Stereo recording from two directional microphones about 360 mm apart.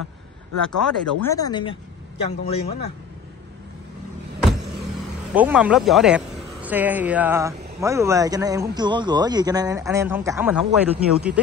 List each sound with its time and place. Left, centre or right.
0.7 s speech: centre
5.3 s speech: centre